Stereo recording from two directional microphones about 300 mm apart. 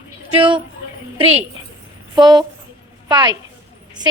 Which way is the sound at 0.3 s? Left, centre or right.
Centre.